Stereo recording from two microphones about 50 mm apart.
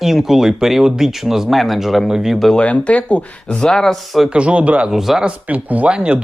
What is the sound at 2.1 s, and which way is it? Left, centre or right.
Speech, centre.